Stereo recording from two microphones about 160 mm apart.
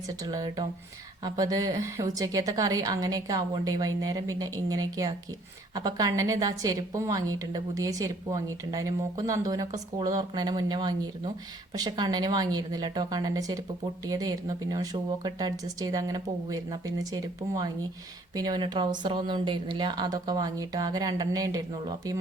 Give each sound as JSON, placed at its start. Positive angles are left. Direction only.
{"t": 0.2, "sound": "a woman's voice", "side_deg": -20}